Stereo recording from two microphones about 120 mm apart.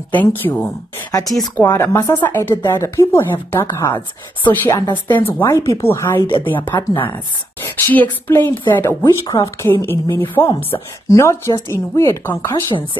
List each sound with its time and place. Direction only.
0.1 s speech: 15° left (ahead or behind)
4.8 s speech: 40° left (ahead or behind)
5.2 s speech: 20° left (ahead or behind)
6.7 s speech: 25° left (ahead or behind)
7.6 s speech: 15° left (ahead or behind)